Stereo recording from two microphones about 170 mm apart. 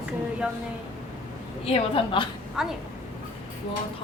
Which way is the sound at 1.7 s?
30° left (ahead or behind).